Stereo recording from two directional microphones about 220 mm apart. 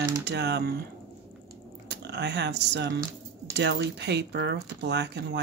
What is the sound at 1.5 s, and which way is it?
Typing, 50° right (ahead or behind).